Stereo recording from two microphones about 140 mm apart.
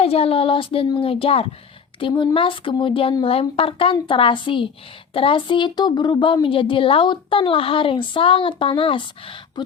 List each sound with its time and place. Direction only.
0.0 s speech: 45° left (ahead or behind)